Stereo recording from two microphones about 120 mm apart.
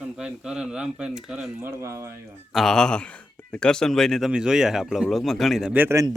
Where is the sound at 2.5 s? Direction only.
5° left (ahead or behind).